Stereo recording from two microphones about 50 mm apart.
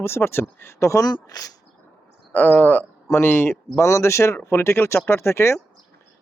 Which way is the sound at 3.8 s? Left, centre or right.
Left.